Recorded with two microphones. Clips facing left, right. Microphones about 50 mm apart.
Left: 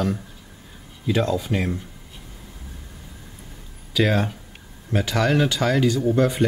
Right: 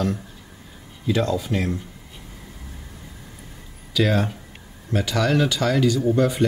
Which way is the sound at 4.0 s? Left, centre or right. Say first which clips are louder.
Even; centre.